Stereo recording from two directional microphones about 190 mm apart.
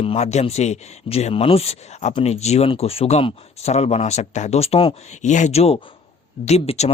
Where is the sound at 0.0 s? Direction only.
30° left (ahead or behind).